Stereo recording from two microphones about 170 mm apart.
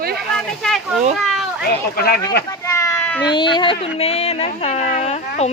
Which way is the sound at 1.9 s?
65° left (ahead or behind).